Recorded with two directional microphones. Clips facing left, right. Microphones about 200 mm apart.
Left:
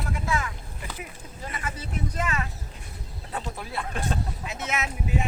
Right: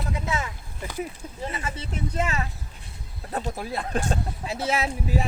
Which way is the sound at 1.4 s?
25° right (ahead or behind).